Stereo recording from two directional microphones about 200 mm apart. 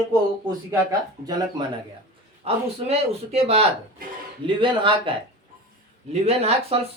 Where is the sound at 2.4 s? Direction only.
30° right (ahead or behind).